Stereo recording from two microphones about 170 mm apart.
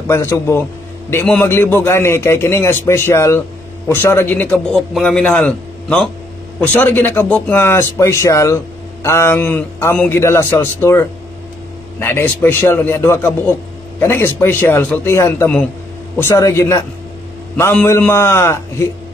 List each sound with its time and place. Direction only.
0.1 s a man's voice: 15° left (ahead or behind)